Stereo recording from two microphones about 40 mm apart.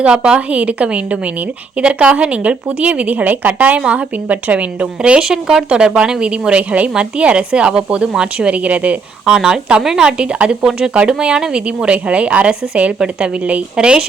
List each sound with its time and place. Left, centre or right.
0.0 s speech: right
5.2 s a woman's voice: centre; by 9.0 s right
9.2 s a woman's voice: centre
10.7 s a woman's voice: centre